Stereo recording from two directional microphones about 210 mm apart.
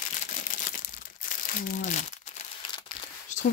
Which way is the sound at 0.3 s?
40° left (ahead or behind).